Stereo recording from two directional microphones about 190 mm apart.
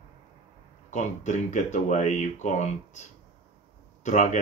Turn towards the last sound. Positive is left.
turn(degrees=40)  # may be behind; listen again after turning